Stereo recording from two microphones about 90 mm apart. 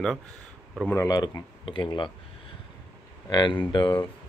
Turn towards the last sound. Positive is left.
turn(degrees=55)  # may be behind; listen again after turning